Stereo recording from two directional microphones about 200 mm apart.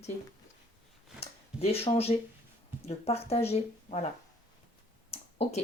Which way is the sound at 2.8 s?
30° left (ahead or behind).